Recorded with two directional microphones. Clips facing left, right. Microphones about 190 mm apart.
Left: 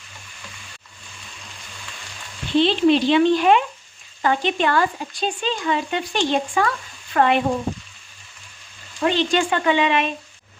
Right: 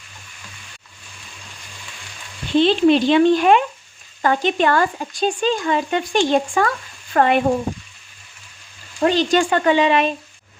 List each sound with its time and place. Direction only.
2.6 s speech: 45° right (ahead or behind)
9.0 s speech: 40° right (ahead or behind)